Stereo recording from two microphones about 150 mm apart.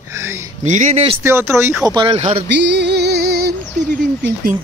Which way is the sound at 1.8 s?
30° right (ahead or behind).